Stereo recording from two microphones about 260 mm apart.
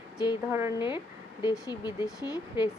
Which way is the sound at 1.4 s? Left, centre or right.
Centre.